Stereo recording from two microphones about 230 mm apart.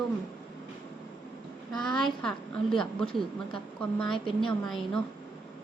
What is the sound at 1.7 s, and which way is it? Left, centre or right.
A woman's voice, centre.